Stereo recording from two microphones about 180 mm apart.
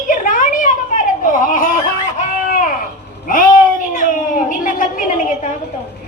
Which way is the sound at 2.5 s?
50° left (ahead or behind).